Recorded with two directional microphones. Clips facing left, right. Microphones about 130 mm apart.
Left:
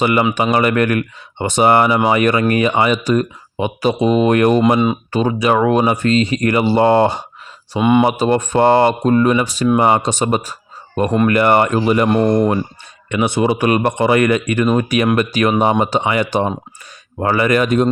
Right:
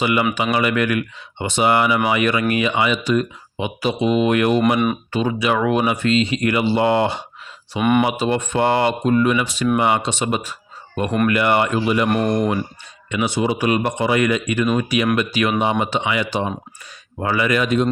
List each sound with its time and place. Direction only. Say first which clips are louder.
0.0 s speech: left 4 dB; 45° left (ahead or behind)
7.8 s speech: left 4 dB; 20° left (ahead or behind)
8.0 s speech: left 5 dB; 40° left (ahead or behind)
12.0 s speech: left 5 dB; 25° left (ahead or behind)
13.1 s speech: left 4 dB; 55° left (ahead or behind)